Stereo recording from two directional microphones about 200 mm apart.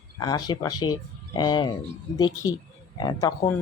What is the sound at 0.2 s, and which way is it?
Speech, 20° left (ahead or behind).